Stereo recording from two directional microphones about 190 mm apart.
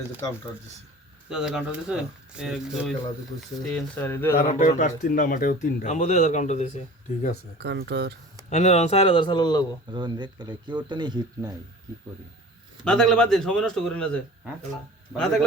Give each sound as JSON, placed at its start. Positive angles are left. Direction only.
{"t": 1.3, "sound": "a man's voice", "side_deg": -5}
{"t": 3.6, "sound": "speech", "side_deg": 5}
{"t": 4.4, "sound": "speech", "side_deg": 40}
{"t": 7.6, "sound": "speech", "side_deg": -60}
{"t": 8.4, "sound": "speech", "side_deg": 35}
{"t": 9.9, "sound": "speech", "side_deg": -25}
{"t": 12.8, "sound": "a man's voice", "side_deg": 5}